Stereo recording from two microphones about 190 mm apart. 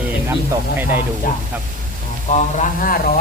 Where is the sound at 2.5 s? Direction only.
50° left (ahead or behind).